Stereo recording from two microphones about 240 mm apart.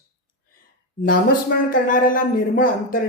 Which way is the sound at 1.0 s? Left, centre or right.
Left.